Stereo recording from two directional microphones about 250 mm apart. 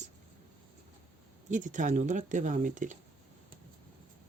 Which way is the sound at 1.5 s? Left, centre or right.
Right.